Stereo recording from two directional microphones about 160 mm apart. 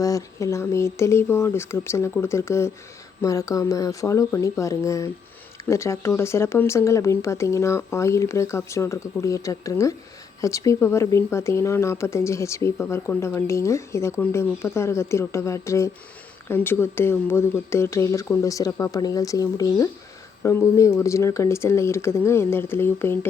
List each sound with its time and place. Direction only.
0.0 s speech: 20° left (ahead or behind)